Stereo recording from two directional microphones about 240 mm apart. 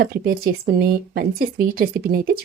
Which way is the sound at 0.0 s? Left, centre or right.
Right.